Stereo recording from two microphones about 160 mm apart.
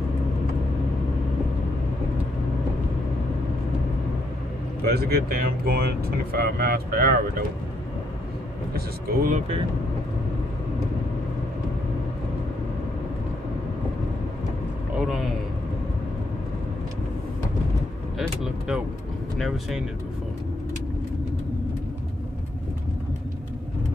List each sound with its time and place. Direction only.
4.8 s speech: 80° right
8.7 s speech: 65° right (ahead or behind)
15.0 s speech: 5° right (ahead or behind)
18.2 s speech: 5° right (ahead or behind)